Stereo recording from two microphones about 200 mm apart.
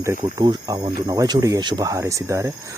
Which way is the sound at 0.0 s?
15° right (ahead or behind).